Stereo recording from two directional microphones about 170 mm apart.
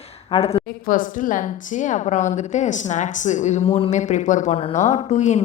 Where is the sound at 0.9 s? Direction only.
50° left (ahead or behind).